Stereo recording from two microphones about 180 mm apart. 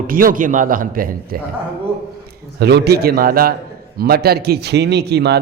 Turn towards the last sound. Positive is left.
turn(degrees=-65)  # may be behind; listen again after turning